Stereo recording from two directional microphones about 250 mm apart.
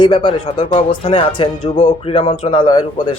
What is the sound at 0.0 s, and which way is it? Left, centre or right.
A man's voice, centre.